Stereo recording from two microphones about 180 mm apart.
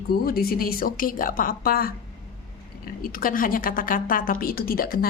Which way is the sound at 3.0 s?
50° left (ahead or behind).